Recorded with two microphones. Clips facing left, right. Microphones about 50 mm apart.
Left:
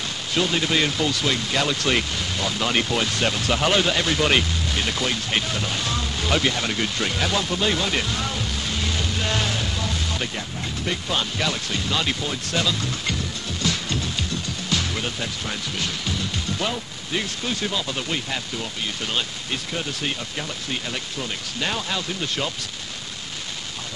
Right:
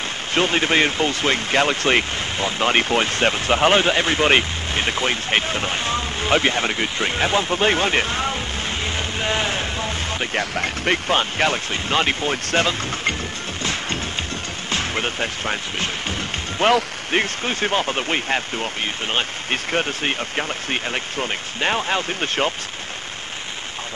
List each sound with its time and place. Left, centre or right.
0.3 s speech: right
10.3 s speech: right
13.6 s music: right
17.1 s speech: right